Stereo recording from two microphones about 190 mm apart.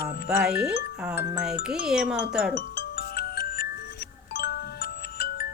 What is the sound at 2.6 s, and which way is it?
Music, 50° left (ahead or behind).